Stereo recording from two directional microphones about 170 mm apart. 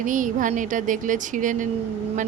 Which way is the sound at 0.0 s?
50° right (ahead or behind).